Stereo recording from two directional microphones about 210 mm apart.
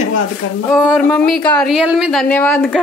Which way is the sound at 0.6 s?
Centre (ahead or behind).